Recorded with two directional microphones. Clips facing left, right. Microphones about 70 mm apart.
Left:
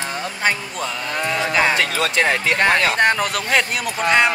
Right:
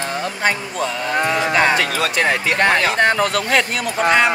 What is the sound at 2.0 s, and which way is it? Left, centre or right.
Speech, right.